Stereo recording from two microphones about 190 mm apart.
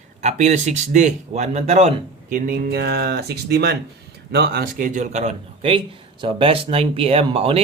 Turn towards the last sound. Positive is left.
turn(degrees=-30)  # may be behind; listen again after turning